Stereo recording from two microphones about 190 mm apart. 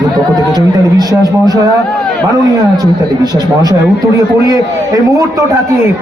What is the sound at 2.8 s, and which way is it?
Speech, 20° right (ahead or behind).